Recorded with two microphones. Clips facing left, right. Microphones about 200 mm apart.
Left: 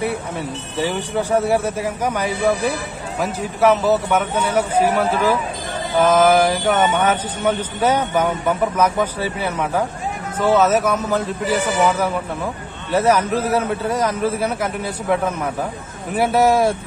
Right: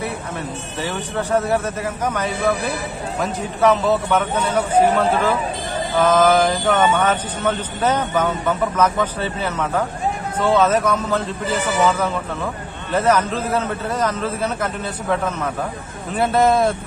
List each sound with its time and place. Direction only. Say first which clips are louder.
0.7 s speech: left 4 dB; 10° left (ahead or behind)